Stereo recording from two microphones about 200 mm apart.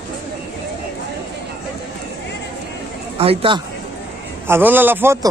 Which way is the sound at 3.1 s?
25° right (ahead or behind).